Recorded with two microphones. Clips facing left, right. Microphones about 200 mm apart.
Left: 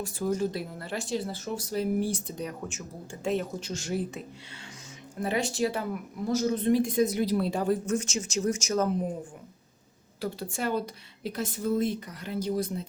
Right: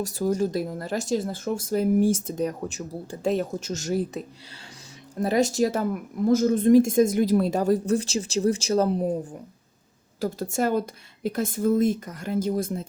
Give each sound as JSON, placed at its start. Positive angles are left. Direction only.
{"t": 0.0, "sound": "speech", "side_deg": -40}
{"t": 5.2, "sound": "speech", "side_deg": -40}
{"t": 10.2, "sound": "speech", "side_deg": -45}